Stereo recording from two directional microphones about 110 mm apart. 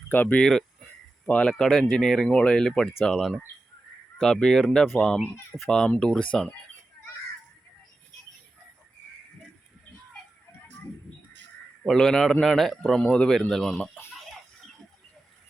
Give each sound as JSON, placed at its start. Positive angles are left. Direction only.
{"t": 0.1, "sound": "speech", "side_deg": 15}
{"t": 0.4, "sound": "speech", "side_deg": 5}
{"t": 11.8, "sound": "speech", "side_deg": 0}